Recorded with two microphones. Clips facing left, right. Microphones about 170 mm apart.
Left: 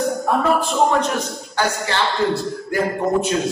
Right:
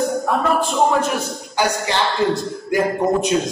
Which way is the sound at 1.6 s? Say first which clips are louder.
Right 1 dB; 15° right (ahead or behind).